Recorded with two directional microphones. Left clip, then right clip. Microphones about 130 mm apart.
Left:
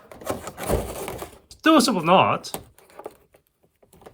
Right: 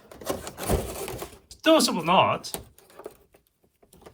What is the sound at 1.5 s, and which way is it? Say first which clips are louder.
Speech: left 2 dB; 40° left (ahead or behind).